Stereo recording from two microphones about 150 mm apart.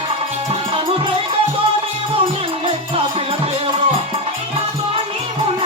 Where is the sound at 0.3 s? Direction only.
45° right (ahead or behind).